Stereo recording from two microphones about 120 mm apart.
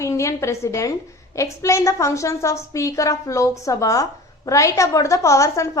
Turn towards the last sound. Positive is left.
turn(degrees=25)  # may be behind; listen again after turning